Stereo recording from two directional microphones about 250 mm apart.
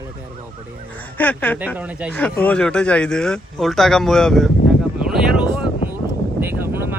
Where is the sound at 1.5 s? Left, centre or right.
Centre.